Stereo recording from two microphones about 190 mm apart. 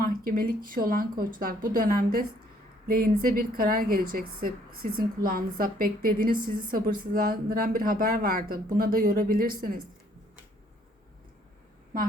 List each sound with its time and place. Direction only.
0.0 s a woman's voice: 50° right (ahead or behind)